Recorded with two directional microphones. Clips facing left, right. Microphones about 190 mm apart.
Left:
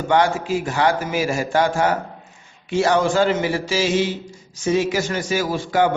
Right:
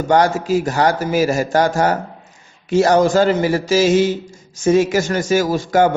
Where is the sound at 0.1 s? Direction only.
40° right (ahead or behind).